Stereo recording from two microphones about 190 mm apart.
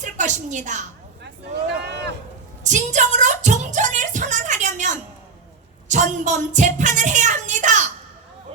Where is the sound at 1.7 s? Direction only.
60° right (ahead or behind).